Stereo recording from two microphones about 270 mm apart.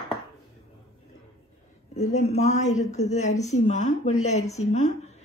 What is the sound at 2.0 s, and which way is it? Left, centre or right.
Speech, left.